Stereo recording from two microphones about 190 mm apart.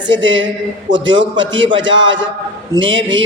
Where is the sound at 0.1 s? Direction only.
80° right.